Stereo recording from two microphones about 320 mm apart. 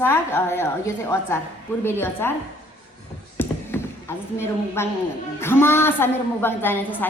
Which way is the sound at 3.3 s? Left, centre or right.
Centre.